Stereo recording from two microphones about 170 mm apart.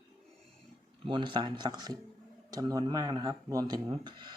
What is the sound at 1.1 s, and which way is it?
Speech, 30° right (ahead or behind).